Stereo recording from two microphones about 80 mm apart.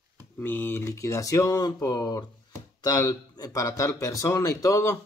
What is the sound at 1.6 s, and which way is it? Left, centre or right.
Speech, left.